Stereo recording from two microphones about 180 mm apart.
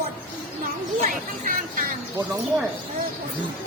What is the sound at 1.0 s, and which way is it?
Speech, 50° right (ahead or behind).